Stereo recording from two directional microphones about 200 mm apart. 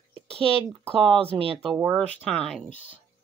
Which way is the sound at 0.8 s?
25° right (ahead or behind).